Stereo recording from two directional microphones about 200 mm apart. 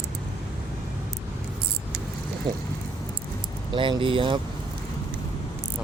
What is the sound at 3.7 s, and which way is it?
Speech, 25° right (ahead or behind).